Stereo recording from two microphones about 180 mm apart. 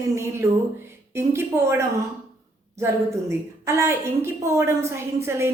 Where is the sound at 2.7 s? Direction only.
15° right (ahead or behind).